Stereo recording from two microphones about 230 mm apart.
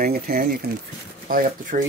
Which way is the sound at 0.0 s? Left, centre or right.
Right.